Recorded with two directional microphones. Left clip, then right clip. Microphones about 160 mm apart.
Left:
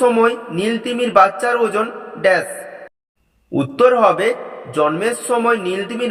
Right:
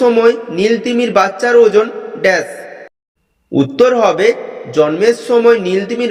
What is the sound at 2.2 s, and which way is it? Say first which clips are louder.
Speech: right 2 dB; 20° right (ahead or behind).